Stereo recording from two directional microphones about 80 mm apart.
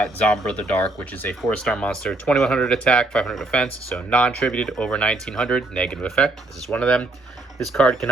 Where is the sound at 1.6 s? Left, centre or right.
Centre.